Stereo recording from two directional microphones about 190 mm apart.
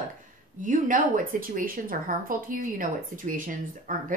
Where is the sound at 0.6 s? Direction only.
45° right (ahead or behind).